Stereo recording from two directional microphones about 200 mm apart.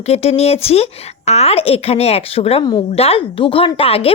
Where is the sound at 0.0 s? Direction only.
30° left (ahead or behind).